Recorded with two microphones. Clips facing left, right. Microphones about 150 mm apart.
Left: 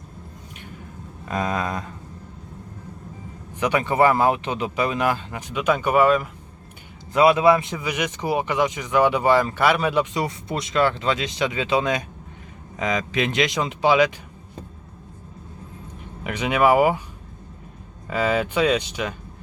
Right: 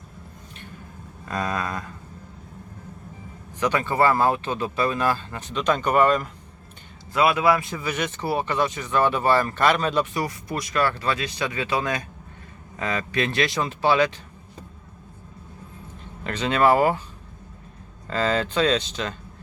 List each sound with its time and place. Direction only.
1.2 s speech: 20° left (ahead or behind)
3.6 s speech: 15° left (ahead or behind)
7.1 s speech: 20° left (ahead or behind)
16.2 s speech: 15° left (ahead or behind)
18.1 s speech: 10° left (ahead or behind)